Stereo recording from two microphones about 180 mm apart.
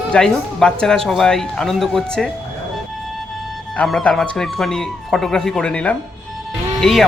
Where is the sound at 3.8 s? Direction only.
5° left (ahead or behind).